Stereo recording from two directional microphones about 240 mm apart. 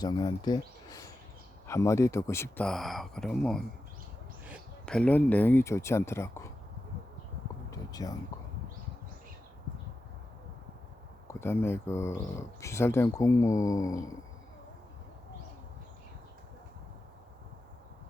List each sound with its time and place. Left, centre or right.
0.0 s speech: centre
7.7 s a sound: centre
11.3 s speech: centre